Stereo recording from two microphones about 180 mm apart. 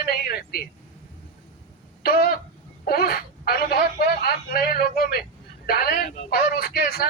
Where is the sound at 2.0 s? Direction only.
55° left (ahead or behind).